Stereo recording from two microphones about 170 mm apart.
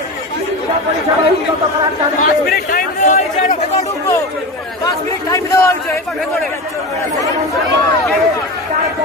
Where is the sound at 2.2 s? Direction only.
55° left (ahead or behind).